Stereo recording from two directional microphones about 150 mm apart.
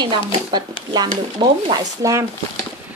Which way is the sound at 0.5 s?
30° right (ahead or behind).